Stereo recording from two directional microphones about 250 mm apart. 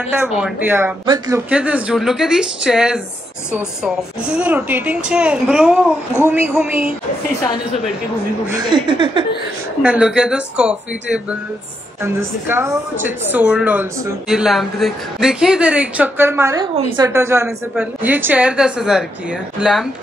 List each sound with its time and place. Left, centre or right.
0.1 s a woman's voice: centre
8.5 s speech: centre
9.8 s a woman's voice: centre